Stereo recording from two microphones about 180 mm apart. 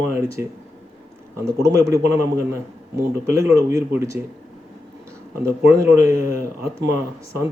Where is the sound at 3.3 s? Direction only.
15° right (ahead or behind).